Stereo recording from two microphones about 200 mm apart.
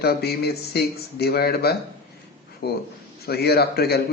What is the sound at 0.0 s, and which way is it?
A man's voice, 50° left (ahead or behind).